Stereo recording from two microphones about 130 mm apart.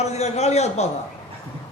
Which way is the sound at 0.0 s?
60° left (ahead or behind).